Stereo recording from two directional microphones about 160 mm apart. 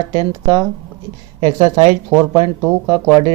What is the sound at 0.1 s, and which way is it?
Speech, 25° right (ahead or behind).